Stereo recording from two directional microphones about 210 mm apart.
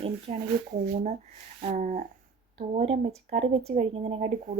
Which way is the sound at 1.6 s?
35° right (ahead or behind).